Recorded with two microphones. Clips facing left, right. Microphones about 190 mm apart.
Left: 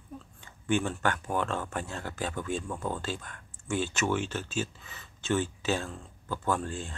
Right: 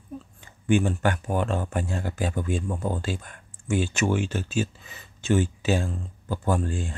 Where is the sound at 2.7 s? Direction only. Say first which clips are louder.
Right 5 dB; 35° right (ahead or behind).